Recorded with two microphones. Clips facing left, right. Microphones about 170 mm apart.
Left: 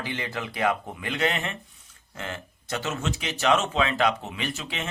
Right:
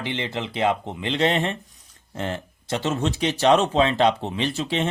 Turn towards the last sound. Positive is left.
turn(degrees=-30)  # may be behind; listen again after turning